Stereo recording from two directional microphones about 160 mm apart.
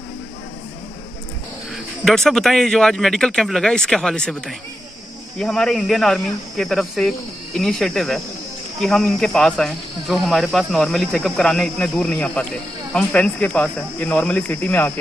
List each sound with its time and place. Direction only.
2.0 s speech: centre (ahead or behind)